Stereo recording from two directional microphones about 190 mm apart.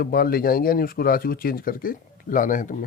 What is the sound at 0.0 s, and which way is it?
Speech, 50° left (ahead or behind).